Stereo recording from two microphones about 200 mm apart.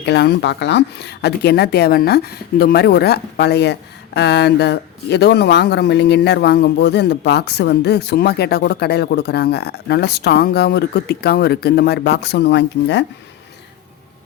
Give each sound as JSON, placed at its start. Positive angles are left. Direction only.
{"t": 0.0, "sound": "speech", "side_deg": 55}